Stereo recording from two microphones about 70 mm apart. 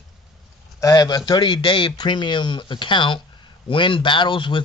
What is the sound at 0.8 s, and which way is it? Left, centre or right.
Speech, left.